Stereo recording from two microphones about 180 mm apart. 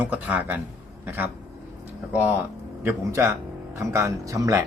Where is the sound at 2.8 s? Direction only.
15° right (ahead or behind).